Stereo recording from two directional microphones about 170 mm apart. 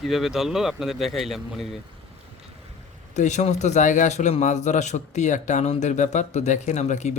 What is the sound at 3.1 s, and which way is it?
A man's voice, 45° left (ahead or behind).